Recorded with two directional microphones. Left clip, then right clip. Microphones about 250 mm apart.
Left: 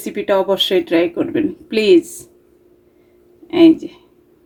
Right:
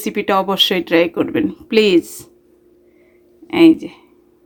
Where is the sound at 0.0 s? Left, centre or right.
Right.